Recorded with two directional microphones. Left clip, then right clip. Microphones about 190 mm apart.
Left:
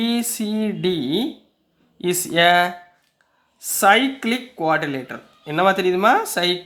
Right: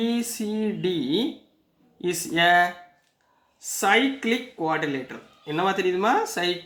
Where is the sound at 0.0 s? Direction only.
40° left (ahead or behind).